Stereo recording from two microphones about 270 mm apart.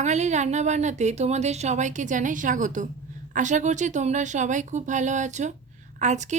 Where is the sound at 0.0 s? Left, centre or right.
Right.